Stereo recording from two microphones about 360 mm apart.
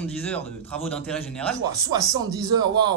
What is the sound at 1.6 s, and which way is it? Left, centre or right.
Speech, centre.